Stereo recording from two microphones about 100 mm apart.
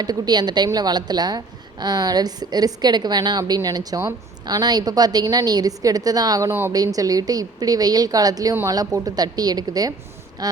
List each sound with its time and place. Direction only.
0.0 s a woman's voice: 45° right (ahead or behind)
6.5 s a woman's voice: 25° right (ahead or behind)
6.7 s a woman's voice: 35° right (ahead or behind)
10.4 s a sound: 40° right (ahead or behind)